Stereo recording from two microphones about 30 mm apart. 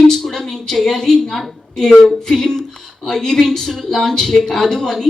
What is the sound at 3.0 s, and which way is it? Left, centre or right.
Speech, centre.